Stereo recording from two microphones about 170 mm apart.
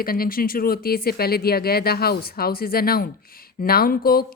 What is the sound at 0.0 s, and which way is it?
Speech, 60° left (ahead or behind).